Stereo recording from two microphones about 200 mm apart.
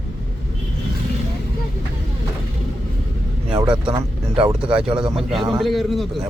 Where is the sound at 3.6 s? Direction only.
25° right (ahead or behind).